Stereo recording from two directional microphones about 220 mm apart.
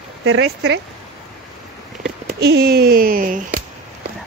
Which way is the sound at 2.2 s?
45° right (ahead or behind).